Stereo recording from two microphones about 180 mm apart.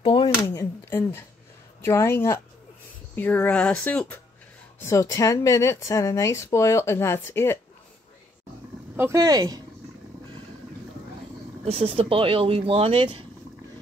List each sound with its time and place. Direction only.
0.0 s a sound: 25° left (ahead or behind)
0.8 s speech: 10° left (ahead or behind)
8.9 s speech: 15° right (ahead or behind)
11.6 s speech: 35° right (ahead or behind)